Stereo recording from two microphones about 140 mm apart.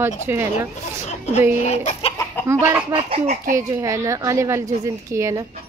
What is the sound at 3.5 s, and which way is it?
Speech, 20° right (ahead or behind).